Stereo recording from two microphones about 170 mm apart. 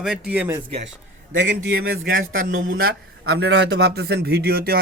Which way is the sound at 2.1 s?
55° right (ahead or behind).